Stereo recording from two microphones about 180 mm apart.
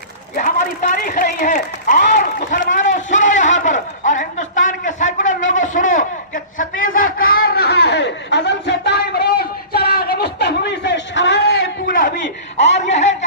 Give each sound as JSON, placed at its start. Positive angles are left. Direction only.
{"t": 0.3, "sound": "a man's voice", "side_deg": 45}